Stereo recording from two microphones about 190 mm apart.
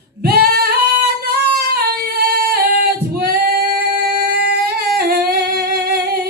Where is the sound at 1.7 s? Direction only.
55° right (ahead or behind).